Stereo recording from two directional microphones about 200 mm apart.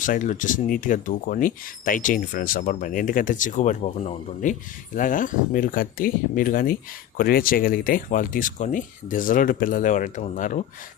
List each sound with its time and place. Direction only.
0.0 s speech: 40° left (ahead or behind)